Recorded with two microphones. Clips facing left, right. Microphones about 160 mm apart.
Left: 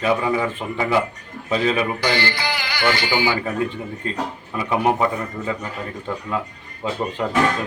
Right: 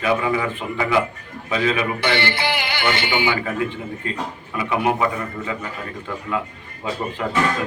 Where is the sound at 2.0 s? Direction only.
25° right (ahead or behind).